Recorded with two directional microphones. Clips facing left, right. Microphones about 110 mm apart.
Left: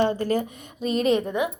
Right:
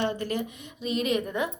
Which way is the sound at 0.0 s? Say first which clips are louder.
Left 6 dB; 40° left (ahead or behind).